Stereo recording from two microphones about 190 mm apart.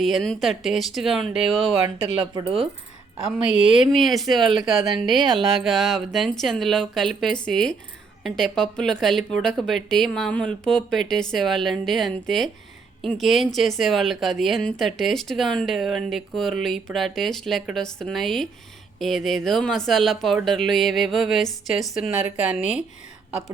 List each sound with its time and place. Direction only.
0.0 s a woman's voice: centre (ahead or behind)
2.3 s speech: 30° right (ahead or behind)
3.8 s a woman's voice: centre (ahead or behind)